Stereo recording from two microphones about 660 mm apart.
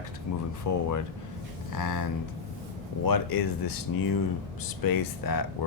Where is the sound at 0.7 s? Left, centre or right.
Left.